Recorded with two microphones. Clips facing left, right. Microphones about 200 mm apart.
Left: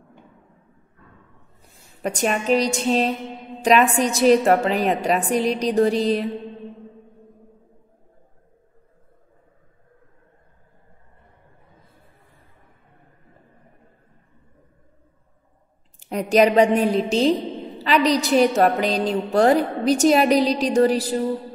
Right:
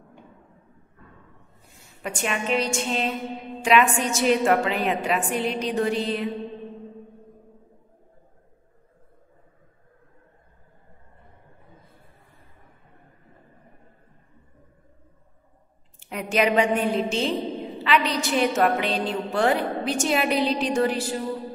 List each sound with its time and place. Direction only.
2.0 s a woman's voice: 40° left (ahead or behind)
16.0 s a woman's voice: 40° left (ahead or behind)